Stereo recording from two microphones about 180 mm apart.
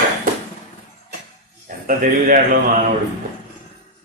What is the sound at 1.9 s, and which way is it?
Speech, 50° right (ahead or behind).